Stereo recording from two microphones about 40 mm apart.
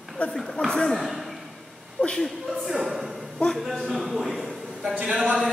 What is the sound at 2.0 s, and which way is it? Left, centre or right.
Speech, left.